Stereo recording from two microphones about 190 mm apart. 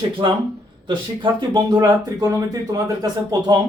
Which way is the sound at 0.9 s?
25° right (ahead or behind).